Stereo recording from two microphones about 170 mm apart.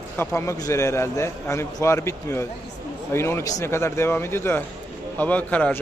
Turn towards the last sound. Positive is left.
turn(degrees=10)  # may be behind; listen again after turning